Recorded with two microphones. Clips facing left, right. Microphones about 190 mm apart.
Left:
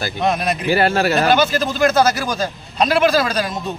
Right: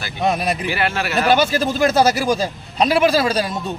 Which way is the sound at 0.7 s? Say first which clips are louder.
Left 6 dB; 40° left (ahead or behind).